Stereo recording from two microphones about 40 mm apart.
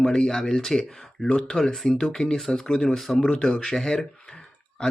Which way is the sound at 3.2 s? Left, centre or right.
Centre.